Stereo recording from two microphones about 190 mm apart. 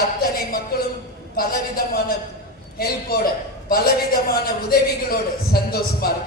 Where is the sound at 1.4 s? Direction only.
50° left (ahead or behind).